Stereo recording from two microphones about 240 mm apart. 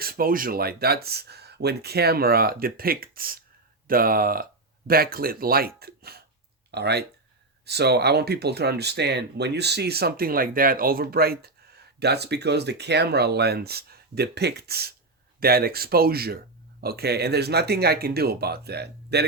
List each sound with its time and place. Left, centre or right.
0.0 s speech: right